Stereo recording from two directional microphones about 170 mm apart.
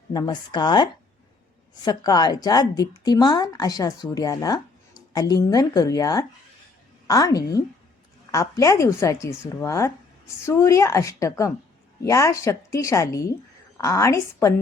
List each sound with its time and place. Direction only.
0.1 s a woman's voice: 25° left (ahead or behind)